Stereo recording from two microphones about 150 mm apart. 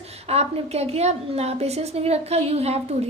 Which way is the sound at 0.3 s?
45° right (ahead or behind).